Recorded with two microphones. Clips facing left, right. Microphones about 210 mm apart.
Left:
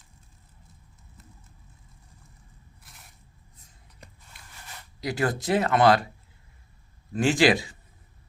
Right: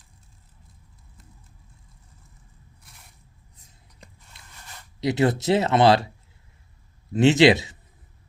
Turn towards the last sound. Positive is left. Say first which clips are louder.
# right 5 dB
turn(degrees=-25)  # may be behind; listen again after turning